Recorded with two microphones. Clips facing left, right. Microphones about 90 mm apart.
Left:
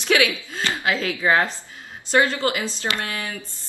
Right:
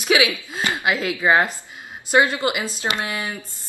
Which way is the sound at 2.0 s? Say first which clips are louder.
Right 1 dB; 15° right (ahead or behind).